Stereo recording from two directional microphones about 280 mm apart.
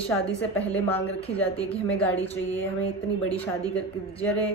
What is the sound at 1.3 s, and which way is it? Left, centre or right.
Speech, left.